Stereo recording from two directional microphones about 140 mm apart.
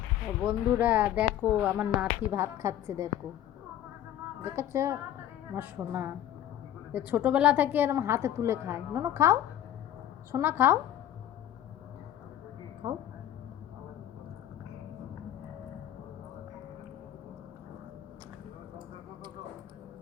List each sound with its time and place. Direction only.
0.4 s speech: 15° right (ahead or behind)
4.4 s a woman's voice: 20° right (ahead or behind)